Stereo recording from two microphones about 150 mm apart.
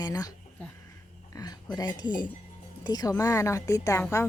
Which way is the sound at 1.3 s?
25° left (ahead or behind).